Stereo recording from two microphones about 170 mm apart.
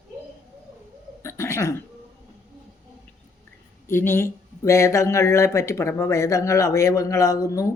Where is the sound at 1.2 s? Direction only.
15° left (ahead or behind).